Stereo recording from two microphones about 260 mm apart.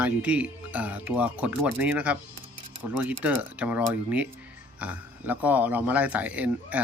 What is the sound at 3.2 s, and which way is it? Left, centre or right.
Speech, centre.